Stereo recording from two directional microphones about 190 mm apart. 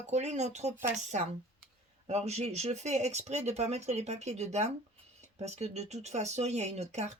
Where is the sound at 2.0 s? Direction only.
35° right (ahead or behind).